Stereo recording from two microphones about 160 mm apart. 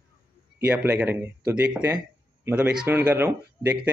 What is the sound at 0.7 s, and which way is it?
Speech, 10° right (ahead or behind).